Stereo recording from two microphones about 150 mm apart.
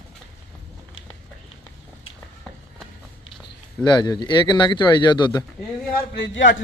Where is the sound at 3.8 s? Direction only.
30° left (ahead or behind).